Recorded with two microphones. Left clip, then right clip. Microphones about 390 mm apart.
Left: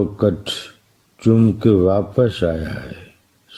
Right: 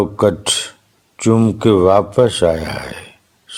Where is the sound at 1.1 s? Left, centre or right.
Centre.